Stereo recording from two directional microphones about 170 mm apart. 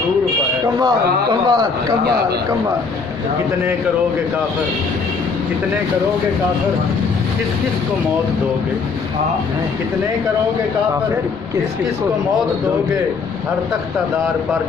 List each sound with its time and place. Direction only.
1.5 s a man's voice: 25° right (ahead or behind)